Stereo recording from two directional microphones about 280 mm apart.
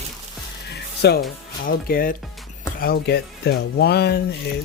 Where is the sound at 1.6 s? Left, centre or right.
Left.